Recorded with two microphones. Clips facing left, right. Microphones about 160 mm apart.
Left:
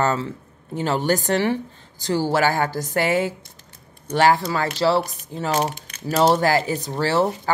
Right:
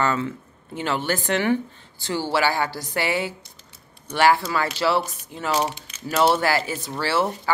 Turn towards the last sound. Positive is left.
turn(degrees=40)  # may be behind; listen again after turning